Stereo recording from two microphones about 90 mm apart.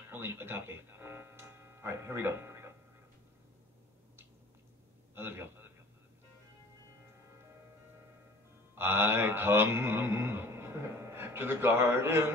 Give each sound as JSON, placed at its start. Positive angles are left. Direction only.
{"t": 0.1, "sound": "speech", "side_deg": -25}
{"t": 5.1, "sound": "a man's voice", "side_deg": -25}
{"t": 8.7, "sound": "speech", "side_deg": -25}